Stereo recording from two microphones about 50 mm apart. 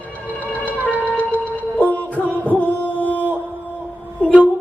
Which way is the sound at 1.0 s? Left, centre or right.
Left.